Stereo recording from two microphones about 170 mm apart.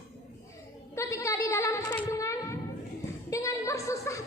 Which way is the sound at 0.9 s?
20° left (ahead or behind).